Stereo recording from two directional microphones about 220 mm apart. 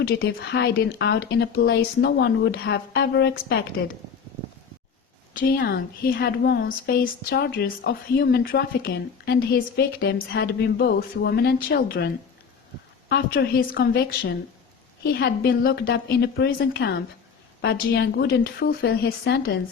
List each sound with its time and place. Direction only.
0.0 s a woman's voice: 45° left (ahead or behind)
5.3 s a woman's voice: 40° left (ahead or behind)